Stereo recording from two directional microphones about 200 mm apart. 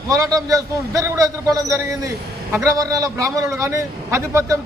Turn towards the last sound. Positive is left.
turn(degrees=-15)  # may be behind; listen again after turning